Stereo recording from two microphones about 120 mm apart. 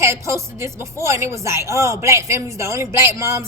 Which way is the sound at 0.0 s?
25° right (ahead or behind).